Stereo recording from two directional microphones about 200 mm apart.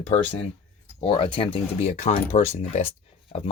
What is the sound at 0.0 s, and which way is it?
Speech, 30° left (ahead or behind).